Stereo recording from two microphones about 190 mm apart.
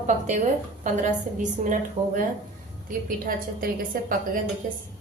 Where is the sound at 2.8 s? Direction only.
50° right (ahead or behind).